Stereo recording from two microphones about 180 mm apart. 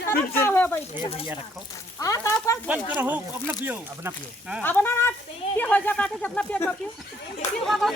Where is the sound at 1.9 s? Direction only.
20° left (ahead or behind).